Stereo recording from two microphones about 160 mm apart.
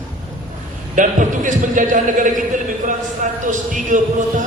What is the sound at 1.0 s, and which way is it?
A man's voice, 55° right (ahead or behind).